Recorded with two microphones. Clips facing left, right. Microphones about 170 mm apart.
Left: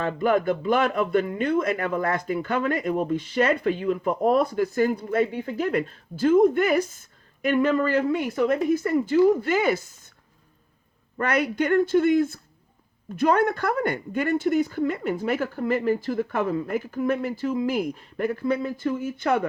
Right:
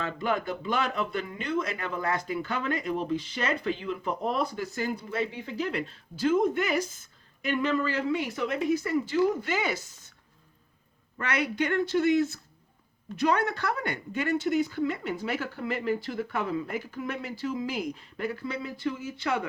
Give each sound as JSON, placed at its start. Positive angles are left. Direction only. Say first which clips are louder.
{"t": 0.0, "sound": "speech", "louder": "left 7 dB", "side_deg": 50}
{"t": 11.2, "sound": "speech", "louder": "left 5 dB", "side_deg": 50}